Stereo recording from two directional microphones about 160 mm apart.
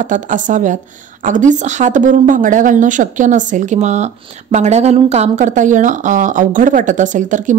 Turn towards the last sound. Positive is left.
turn(degrees=-50)  # may be behind; listen again after turning